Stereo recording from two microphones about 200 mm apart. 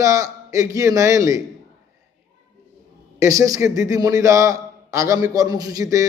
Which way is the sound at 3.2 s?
15° right (ahead or behind).